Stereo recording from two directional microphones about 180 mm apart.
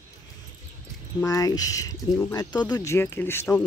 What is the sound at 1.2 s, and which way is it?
Speech, 20° left (ahead or behind).